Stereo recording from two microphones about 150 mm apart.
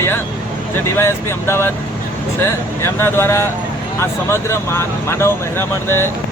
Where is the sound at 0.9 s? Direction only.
15° left (ahead or behind).